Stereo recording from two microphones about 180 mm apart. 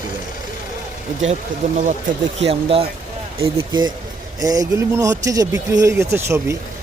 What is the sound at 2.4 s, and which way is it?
Speech, 35° right (ahead or behind).